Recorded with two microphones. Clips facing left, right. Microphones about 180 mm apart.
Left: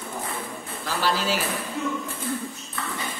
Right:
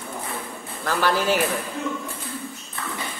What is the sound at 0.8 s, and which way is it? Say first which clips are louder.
Speech: right 4 dB; 55° right (ahead or behind).